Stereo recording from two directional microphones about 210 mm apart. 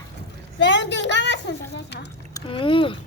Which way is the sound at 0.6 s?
55° left (ahead or behind).